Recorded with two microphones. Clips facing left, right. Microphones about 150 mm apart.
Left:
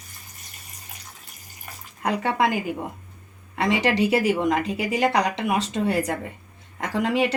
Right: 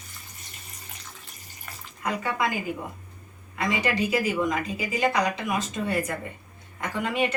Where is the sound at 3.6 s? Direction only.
75° left (ahead or behind).